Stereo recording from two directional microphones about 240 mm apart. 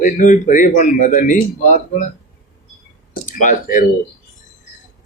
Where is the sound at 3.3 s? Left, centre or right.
Left.